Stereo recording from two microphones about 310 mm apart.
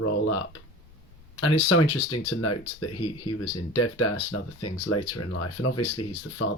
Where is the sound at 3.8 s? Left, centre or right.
Left.